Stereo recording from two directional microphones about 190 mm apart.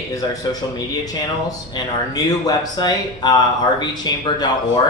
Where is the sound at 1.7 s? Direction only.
20° left (ahead or behind).